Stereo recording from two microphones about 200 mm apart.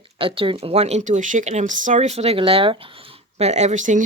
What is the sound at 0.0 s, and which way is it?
Speech, 25° right (ahead or behind).